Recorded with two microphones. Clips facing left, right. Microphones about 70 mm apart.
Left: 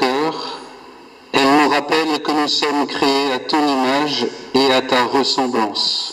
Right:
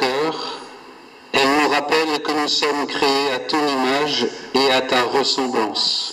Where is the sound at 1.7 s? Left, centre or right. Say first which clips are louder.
Left 2 dB; centre.